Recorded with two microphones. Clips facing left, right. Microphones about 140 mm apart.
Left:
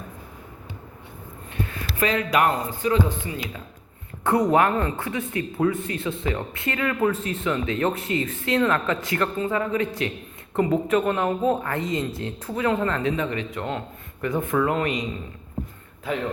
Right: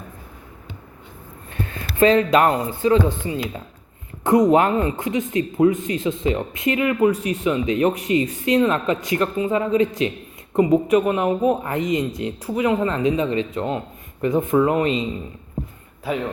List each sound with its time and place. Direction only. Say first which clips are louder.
1.7 s speech: right 9 dB; 30° right (ahead or behind)